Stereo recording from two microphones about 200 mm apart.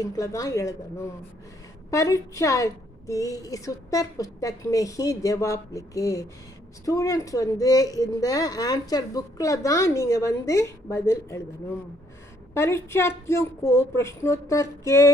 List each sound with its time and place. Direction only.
0.0 s speech: 15° left (ahead or behind)
1.9 s speech: 15° left (ahead or behind)
12.5 s speech: 10° left (ahead or behind)